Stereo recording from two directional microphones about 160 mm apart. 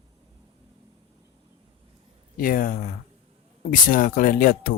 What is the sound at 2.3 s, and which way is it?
Speech, 60° left (ahead or behind).